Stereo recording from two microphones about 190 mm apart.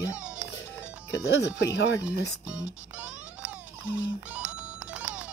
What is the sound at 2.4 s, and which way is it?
Speech, 5° right (ahead or behind).